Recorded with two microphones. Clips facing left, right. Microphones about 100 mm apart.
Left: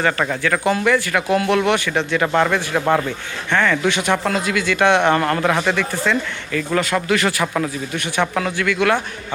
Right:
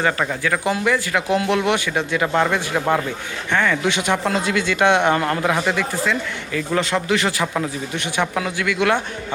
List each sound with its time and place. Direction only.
0.0 s speech: 15° right (ahead or behind)